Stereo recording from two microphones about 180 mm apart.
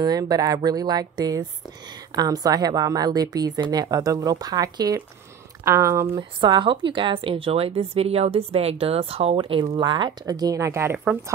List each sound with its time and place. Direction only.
0.0 s a woman's voice: 20° right (ahead or behind)